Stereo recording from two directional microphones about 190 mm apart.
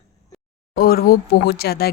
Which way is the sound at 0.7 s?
50° left (ahead or behind).